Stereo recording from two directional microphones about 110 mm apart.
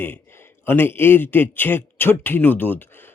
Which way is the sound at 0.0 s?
20° left (ahead or behind).